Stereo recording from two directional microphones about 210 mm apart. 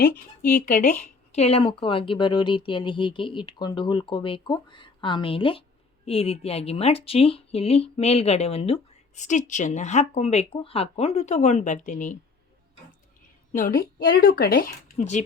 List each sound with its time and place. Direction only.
0.0 s speech: 45° left (ahead or behind)
1.3 s a woman's voice: 30° left (ahead or behind)
13.5 s speech: 40° left (ahead or behind)